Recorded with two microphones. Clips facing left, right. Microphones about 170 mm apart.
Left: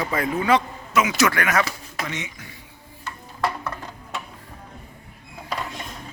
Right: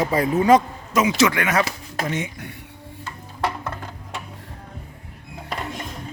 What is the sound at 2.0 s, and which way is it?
Speech, 45° right (ahead or behind).